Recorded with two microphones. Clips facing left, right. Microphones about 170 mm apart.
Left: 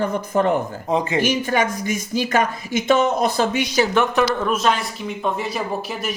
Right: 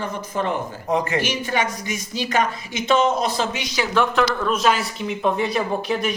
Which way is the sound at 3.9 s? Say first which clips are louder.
Left 1 dB; 15° left (ahead or behind).